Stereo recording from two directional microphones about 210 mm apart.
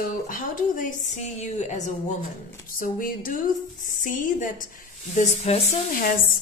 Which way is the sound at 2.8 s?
40° left (ahead or behind).